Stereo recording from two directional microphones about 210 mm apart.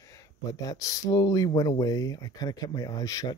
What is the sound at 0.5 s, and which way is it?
Speech, 15° left (ahead or behind).